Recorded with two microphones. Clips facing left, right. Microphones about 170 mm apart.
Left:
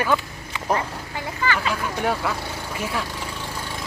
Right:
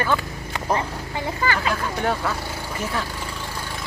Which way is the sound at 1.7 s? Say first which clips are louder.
Even; 5° left (ahead or behind).